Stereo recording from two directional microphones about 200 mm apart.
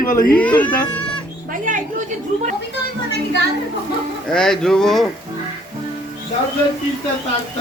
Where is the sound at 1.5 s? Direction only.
40° right (ahead or behind).